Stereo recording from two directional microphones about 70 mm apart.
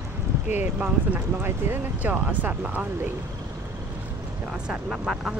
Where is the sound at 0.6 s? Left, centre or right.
Right.